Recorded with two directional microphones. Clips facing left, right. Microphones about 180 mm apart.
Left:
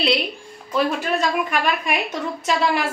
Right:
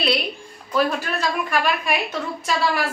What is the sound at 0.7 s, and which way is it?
A woman's voice, 20° left (ahead or behind).